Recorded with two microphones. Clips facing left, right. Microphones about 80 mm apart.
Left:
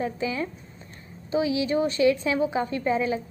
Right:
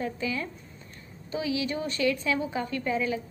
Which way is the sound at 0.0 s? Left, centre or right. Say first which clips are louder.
Left 3 dB; left.